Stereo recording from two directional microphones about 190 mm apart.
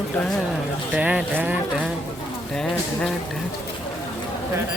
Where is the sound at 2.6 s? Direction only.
5° left (ahead or behind).